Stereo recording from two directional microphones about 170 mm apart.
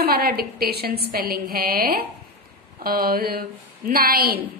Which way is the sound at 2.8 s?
60° right (ahead or behind).